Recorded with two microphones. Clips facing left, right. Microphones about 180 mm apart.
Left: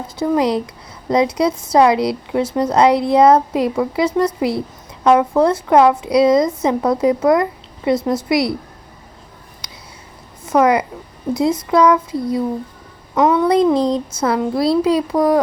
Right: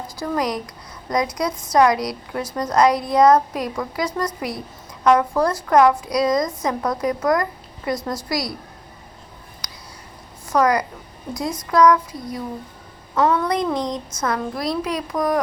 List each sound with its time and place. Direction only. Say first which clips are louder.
0.2 s a woman's voice: left 7 dB; 25° left (ahead or behind)
10.4 s a woman's voice: left 4 dB; 25° left (ahead or behind)
13.5 s a woman's voice: left 8 dB; 25° left (ahead or behind)